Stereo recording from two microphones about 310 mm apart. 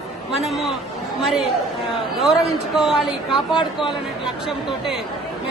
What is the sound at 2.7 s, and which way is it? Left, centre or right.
Speech, centre.